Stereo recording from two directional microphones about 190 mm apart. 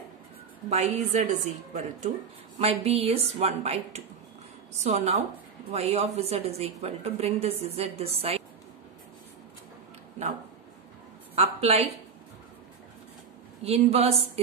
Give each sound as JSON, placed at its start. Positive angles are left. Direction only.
{"t": 0.7, "sound": "a woman's voice", "side_deg": -35}
{"t": 11.3, "sound": "speech", "side_deg": -35}
{"t": 13.7, "sound": "a woman's voice", "side_deg": -30}